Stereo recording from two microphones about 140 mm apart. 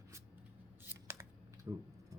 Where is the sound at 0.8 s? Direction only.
15° right (ahead or behind).